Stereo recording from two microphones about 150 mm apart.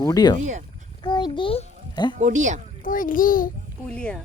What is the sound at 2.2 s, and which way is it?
Speech, 55° right (ahead or behind).